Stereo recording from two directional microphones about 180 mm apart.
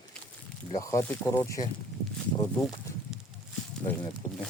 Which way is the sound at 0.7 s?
20° left (ahead or behind).